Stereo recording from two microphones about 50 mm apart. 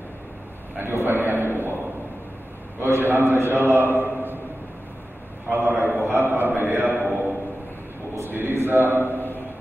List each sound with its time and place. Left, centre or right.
0.7 s a man's voice: right
2.8 s a man's voice: right
3.9 s a sound: right
5.5 s a man's voice: right
8.2 s a man's voice: right
9.0 s a sound: left